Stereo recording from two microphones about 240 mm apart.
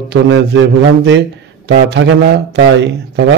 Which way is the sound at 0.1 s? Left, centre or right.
Right.